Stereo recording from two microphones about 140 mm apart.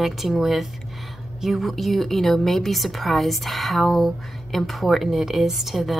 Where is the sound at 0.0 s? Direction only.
Centre (ahead or behind).